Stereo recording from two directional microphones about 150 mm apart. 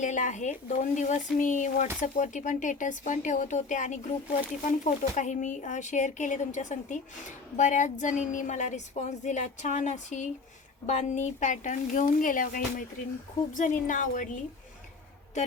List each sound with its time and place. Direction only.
0.0 s a woman's voice: 55° left (ahead or behind)